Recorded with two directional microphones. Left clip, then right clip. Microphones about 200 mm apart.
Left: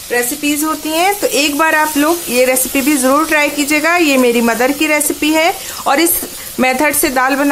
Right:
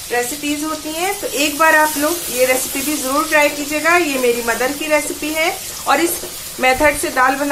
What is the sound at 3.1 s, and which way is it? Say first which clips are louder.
Speech: left 2 dB; 55° left (ahead or behind).